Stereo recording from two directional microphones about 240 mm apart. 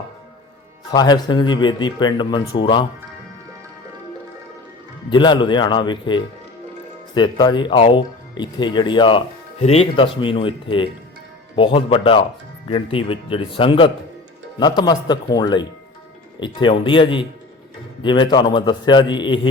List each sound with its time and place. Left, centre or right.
0.9 s speech: centre
5.1 s speech: centre